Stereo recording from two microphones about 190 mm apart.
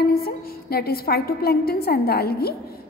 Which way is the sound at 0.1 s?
55° left (ahead or behind).